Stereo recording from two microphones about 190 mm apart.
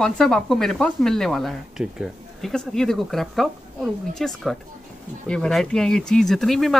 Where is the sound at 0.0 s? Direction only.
Centre (ahead or behind).